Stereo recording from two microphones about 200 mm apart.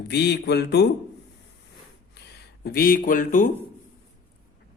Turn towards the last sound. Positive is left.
turn(degrees=40)  # may be behind; listen again after turning